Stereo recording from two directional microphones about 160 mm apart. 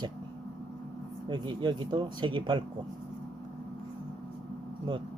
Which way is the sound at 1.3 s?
30° right (ahead or behind).